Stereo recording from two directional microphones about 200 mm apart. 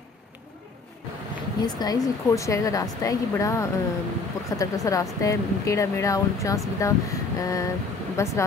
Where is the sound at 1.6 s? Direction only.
20° left (ahead or behind).